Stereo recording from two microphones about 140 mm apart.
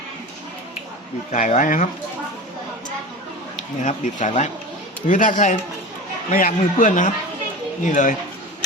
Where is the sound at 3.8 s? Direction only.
65° left (ahead or behind).